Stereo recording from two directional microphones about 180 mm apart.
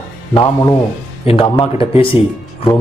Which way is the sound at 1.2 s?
35° left (ahead or behind).